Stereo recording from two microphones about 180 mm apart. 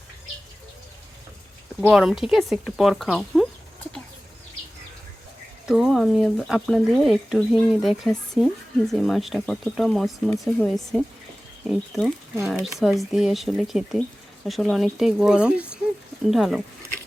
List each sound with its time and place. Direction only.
1.8 s speech: 5° right (ahead or behind)
5.6 s speech: centre (ahead or behind)